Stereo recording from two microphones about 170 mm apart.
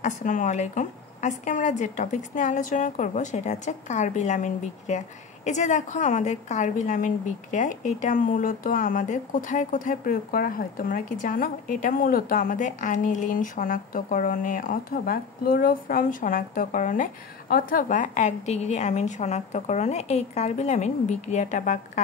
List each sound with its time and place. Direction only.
0.0 s a woman's voice: 50° left (ahead or behind)